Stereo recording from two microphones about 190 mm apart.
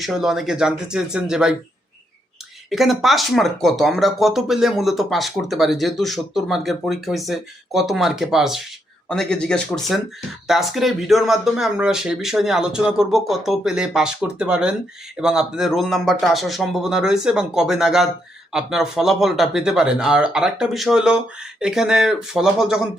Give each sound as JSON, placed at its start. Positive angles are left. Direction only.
{"t": 0.0, "sound": "speech", "side_deg": 0}
{"t": 2.6, "sound": "speech", "side_deg": 0}